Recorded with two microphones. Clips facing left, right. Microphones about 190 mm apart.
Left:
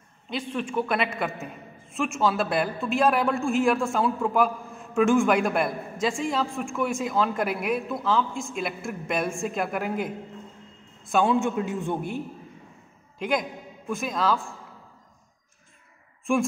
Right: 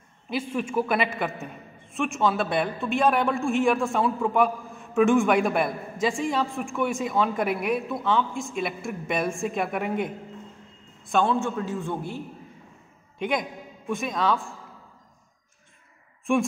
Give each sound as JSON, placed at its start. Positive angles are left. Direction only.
{"t": 0.3, "sound": "a man's voice", "side_deg": -5}
{"t": 11.3, "sound": "a man's voice", "side_deg": 15}
{"t": 13.2, "sound": "a man's voice", "side_deg": 0}
{"t": 16.3, "sound": "a man's voice", "side_deg": 0}